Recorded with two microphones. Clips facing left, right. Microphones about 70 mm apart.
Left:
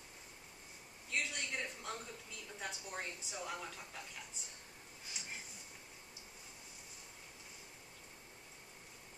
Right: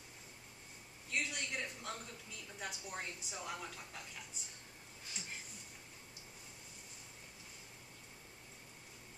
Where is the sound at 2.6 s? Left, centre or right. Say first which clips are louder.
Even; centre.